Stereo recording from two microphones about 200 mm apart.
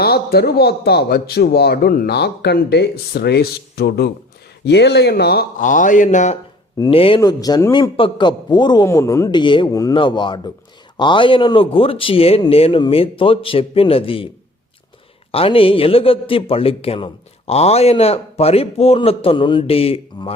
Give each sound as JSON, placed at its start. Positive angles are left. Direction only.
{"t": 0.0, "sound": "speech", "side_deg": 50}
{"t": 6.7, "sound": "a man's voice", "side_deg": 25}
{"t": 15.3, "sound": "a man's voice", "side_deg": 30}